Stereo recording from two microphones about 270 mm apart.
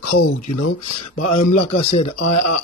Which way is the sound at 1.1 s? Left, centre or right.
Left.